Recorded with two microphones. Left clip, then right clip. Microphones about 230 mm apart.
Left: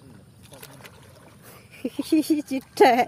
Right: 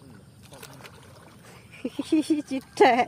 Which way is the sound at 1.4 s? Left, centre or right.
Centre.